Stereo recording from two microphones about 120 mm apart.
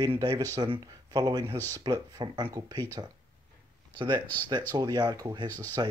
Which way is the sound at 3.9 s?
40° right (ahead or behind).